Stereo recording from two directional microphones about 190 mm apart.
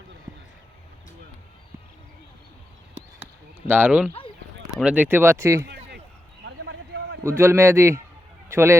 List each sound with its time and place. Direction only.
3.7 s speech: 10° right (ahead or behind)
6.4 s a sound: 70° right (ahead or behind)
7.3 s a man's voice: 10° right (ahead or behind)